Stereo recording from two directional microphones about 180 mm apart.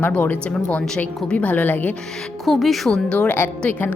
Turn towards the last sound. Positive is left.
turn(degrees=10)  # may be behind; listen again after turning